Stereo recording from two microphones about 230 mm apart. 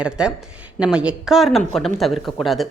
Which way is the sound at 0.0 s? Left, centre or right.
Centre.